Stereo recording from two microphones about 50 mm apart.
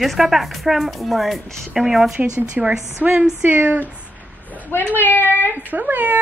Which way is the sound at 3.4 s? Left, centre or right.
Right.